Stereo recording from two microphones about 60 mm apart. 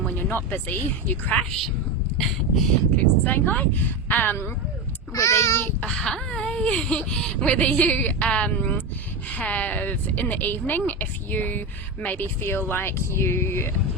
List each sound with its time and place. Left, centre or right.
0.1 s speech: left
2.1 s a sound: centre
3.2 s speech: left
5.1 s a child's voice: left
5.9 s speech: centre; by 13.7 s left